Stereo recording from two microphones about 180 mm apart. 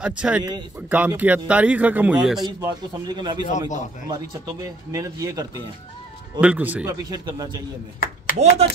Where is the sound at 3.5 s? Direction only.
45° left (ahead or behind).